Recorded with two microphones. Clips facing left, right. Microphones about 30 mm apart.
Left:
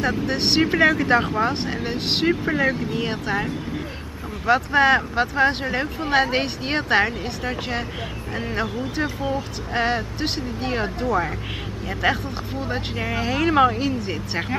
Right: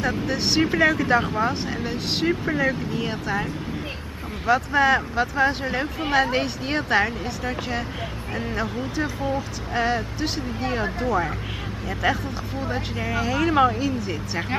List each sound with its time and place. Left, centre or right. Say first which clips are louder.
0.0 s speech: left 2 dB; centre
1.7 s speech: left 2 dB; left
2.2 s speech: left 2 dB; centre
4.7 s speech: left 3 dB; left
11.1 s speech: left 1 dB; centre
12.0 s speech: left 2 dB; left
13.7 s speech: left 1 dB; left